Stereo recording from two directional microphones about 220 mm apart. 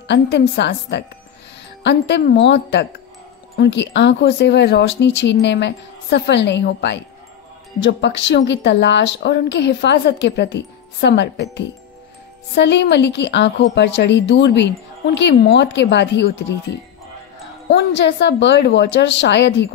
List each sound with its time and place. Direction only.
0.1 s a woman's voice: 50° left (ahead or behind)
17.7 s a woman's voice: 50° left (ahead or behind)